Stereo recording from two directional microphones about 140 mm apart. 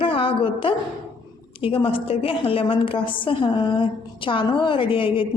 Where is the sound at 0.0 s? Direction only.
40° left (ahead or behind).